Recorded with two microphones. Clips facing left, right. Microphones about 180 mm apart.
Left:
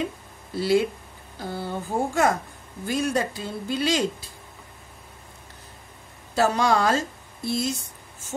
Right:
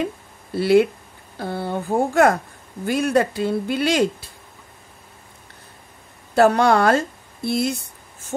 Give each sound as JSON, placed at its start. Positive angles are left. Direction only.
{"t": 0.6, "sound": "speech", "side_deg": -60}
{"t": 6.3, "sound": "a woman's voice", "side_deg": -60}